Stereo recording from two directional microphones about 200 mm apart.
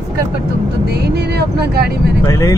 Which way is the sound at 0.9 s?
55° right (ahead or behind).